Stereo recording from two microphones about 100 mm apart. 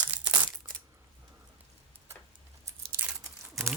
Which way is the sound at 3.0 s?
10° right (ahead or behind).